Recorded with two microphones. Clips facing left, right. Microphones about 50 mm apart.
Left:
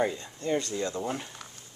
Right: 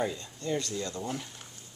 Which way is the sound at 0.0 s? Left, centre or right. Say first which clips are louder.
Left 4 dB; centre.